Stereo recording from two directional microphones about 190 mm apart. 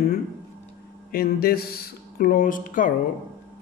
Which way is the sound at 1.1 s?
50° left (ahead or behind).